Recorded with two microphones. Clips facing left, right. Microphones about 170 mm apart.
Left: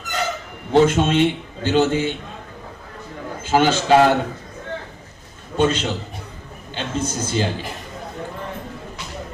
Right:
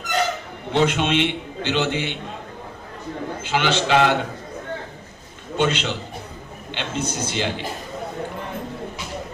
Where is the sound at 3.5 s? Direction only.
40° left (ahead or behind).